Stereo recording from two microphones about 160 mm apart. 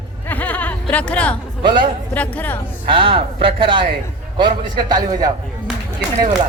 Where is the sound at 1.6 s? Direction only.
30° right (ahead or behind).